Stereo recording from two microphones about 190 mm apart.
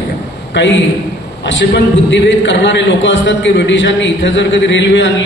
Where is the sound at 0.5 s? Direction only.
70° left (ahead or behind).